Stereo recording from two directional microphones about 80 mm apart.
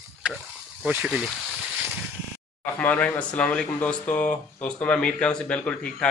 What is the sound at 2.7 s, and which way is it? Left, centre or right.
A man's voice, centre.